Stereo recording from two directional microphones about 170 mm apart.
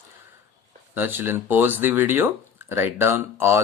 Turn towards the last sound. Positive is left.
turn(degrees=-15)  # may be behind; listen again after turning